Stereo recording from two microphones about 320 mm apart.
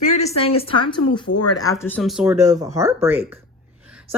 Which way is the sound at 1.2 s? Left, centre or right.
Left.